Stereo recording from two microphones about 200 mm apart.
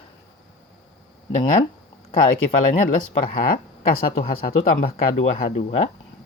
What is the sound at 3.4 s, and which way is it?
Speech, 45° left (ahead or behind).